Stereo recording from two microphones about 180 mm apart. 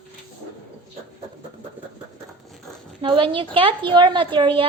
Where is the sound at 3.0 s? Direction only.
30° right (ahead or behind).